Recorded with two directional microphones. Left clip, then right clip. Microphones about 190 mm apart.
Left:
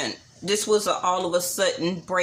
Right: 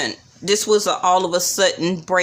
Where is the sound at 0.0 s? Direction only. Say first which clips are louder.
Right 5 dB; 40° right (ahead or behind).